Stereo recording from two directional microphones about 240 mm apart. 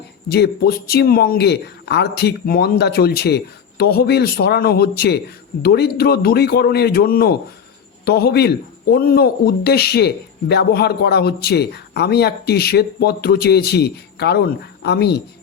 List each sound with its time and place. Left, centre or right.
0.3 s a man's voice: left